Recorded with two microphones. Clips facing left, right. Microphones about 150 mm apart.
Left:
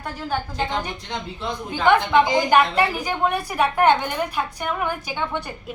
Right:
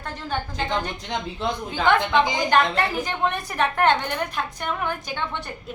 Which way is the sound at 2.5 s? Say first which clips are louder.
Left 3 dB; 10° left (ahead or behind).